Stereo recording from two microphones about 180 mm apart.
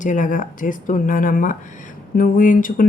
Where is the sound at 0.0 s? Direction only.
45° left (ahead or behind).